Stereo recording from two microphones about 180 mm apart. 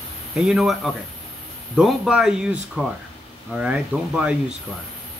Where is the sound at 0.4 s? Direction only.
Centre (ahead or behind).